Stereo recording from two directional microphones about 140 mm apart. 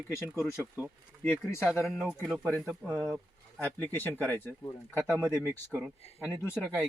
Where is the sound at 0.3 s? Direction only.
Centre (ahead or behind).